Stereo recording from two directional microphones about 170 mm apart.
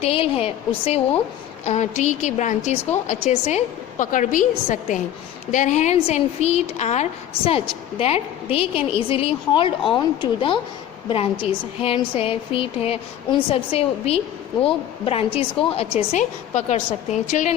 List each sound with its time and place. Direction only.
0.0 s a woman's voice: 35° left (ahead or behind)